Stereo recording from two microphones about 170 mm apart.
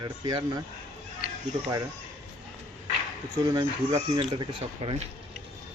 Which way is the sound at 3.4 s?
25° right (ahead or behind).